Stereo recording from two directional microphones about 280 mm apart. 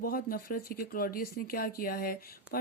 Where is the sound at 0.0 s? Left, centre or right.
Left.